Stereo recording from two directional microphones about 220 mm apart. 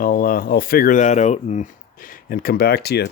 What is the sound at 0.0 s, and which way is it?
Speech, 40° left (ahead or behind).